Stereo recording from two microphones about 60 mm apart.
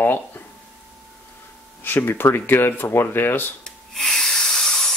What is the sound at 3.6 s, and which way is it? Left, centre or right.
Snort, centre.